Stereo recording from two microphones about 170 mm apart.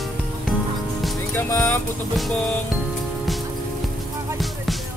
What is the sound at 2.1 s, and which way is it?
Music, 5° left (ahead or behind).